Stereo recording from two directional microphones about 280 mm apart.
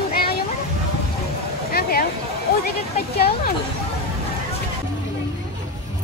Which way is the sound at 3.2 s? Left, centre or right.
Left.